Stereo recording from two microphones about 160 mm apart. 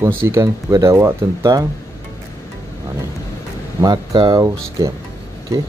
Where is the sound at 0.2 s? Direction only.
15° right (ahead or behind).